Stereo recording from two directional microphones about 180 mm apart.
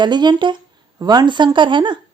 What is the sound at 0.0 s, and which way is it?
Speech, 25° right (ahead or behind).